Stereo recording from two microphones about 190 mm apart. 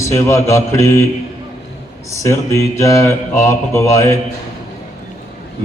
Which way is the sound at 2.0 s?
15° left (ahead or behind).